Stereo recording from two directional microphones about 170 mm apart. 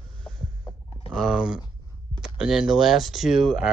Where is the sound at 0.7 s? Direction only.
35° left (ahead or behind).